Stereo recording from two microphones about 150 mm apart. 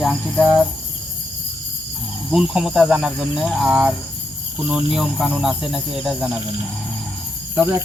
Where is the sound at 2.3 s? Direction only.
5° right (ahead or behind).